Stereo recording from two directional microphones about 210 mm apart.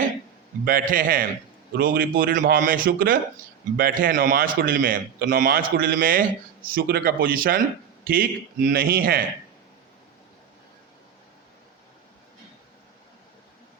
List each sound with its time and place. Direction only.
0.6 s a man's voice: 40° right (ahead or behind)